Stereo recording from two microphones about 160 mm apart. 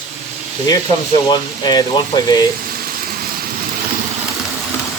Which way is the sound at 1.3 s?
25° left (ahead or behind).